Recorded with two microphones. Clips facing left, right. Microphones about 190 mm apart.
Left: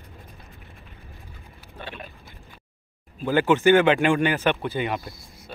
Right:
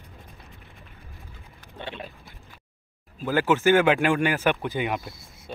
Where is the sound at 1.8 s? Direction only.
20° right (ahead or behind).